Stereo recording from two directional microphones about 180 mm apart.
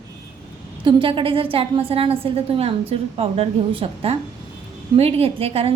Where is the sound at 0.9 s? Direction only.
30° right (ahead or behind).